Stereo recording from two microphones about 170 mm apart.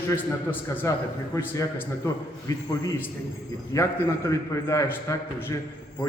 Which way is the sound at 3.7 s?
20° left (ahead or behind).